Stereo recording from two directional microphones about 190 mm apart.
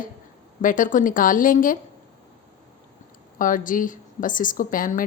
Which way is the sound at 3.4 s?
45° left (ahead or behind).